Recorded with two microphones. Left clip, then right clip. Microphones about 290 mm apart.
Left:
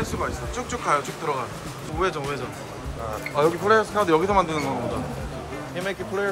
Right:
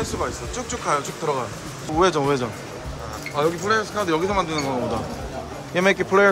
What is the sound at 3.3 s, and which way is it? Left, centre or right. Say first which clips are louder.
Speech: left 2 dB; centre.